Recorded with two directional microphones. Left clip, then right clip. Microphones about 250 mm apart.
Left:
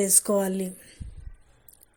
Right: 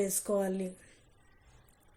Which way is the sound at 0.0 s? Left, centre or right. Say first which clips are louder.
Left 7 dB; left.